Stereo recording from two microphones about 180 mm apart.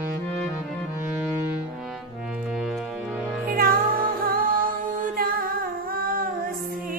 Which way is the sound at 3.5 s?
55° right (ahead or behind).